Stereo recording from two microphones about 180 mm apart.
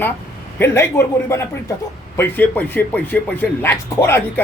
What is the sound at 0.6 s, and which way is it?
Speech, 15° left (ahead or behind).